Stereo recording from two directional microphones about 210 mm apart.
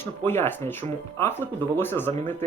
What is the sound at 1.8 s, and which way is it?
Speech, 10° left (ahead or behind).